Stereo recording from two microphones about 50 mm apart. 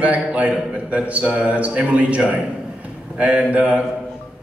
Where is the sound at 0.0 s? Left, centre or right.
Right.